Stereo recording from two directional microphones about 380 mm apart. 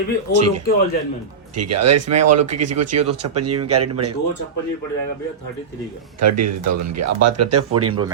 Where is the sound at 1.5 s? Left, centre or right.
Right.